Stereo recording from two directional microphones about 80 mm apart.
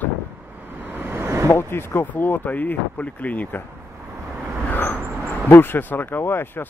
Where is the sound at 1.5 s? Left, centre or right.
Left.